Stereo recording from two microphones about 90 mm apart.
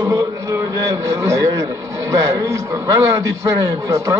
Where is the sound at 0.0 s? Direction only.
35° right (ahead or behind).